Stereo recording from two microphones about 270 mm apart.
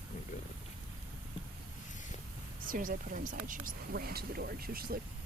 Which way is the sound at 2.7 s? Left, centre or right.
Right.